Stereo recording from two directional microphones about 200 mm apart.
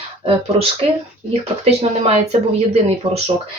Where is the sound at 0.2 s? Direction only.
30° right (ahead or behind).